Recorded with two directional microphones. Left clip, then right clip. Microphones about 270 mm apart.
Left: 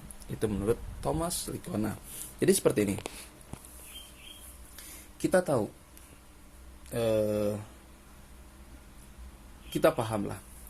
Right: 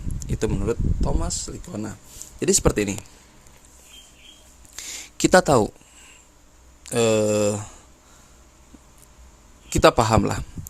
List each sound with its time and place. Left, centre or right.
0.2 s speech: right; by 2.2 s centre
2.4 s speech: centre
5.1 s speech: right
6.8 s speech: right
9.6 s speech: right